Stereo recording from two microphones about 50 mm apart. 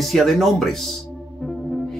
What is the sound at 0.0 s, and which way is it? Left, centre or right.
Speech, centre.